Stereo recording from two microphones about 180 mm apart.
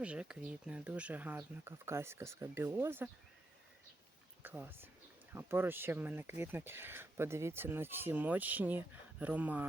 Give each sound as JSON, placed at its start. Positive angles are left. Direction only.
{"t": 0.0, "sound": "speech", "side_deg": -5}
{"t": 4.4, "sound": "speech", "side_deg": -10}